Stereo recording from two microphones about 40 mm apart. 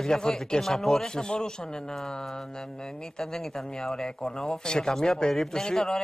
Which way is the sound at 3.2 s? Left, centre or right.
Centre.